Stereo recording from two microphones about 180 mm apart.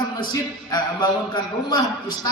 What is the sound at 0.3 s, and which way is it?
A man's voice, 25° left (ahead or behind).